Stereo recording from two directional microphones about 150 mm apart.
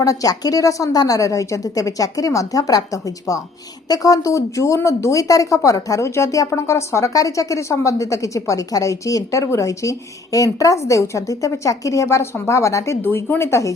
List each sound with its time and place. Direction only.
0.0 s a woman's voice: 25° left (ahead or behind)